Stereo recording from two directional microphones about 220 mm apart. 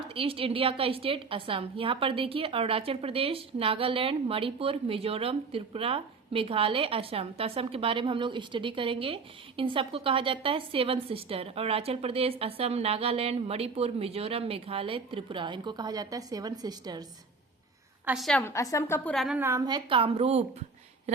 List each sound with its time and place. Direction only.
0.1 s a woman's voice: 25° right (ahead or behind)
18.0 s a woman's voice: centre (ahead or behind)
19.4 s a woman's voice: 15° right (ahead or behind); by 20.4 s 30° right (ahead or behind)